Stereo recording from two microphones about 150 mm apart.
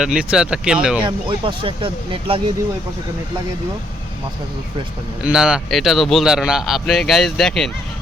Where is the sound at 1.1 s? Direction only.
35° right (ahead or behind).